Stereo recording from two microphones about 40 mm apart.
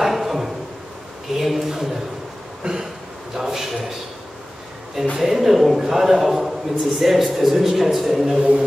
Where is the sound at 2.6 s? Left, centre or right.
Right.